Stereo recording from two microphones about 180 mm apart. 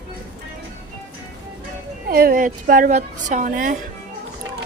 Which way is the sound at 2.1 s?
55° right (ahead or behind).